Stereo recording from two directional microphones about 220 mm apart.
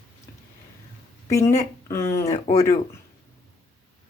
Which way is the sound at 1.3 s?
15° left (ahead or behind).